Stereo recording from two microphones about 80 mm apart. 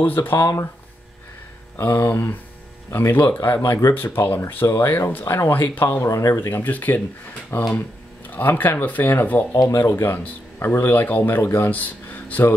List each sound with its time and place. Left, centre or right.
0.0 s a man's voice: left
1.8 s a man's voice: left
6.0 s speech: left
6.6 s a man's voice: left
8.4 s a man's voice: left
9.6 s a man's voice: left